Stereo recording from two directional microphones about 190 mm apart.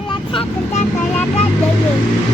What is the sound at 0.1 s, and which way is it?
Speech, 25° left (ahead or behind).